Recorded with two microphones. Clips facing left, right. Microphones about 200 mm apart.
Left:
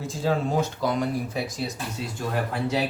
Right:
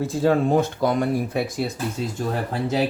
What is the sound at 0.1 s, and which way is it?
Speech, 60° right (ahead or behind).